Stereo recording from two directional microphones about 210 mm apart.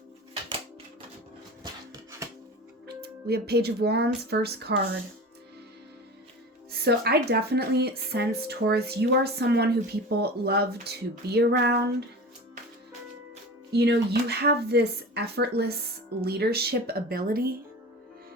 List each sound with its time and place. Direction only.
2.8 s speech: 50° right (ahead or behind)
6.7 s speech: 50° right (ahead or behind)
13.7 s speech: 50° right (ahead or behind)